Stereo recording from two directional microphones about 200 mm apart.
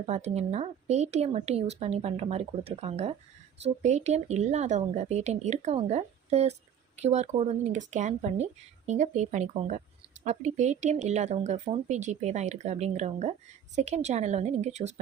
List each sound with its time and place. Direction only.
0.0 s a woman's voice: 30° right (ahead or behind)